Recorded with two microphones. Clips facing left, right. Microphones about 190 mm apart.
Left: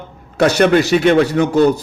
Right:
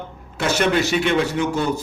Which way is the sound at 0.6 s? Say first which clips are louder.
Left 6 dB; 60° left (ahead or behind).